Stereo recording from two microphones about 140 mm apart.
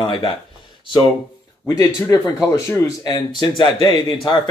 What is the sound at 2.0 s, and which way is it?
Speech, 25° left (ahead or behind).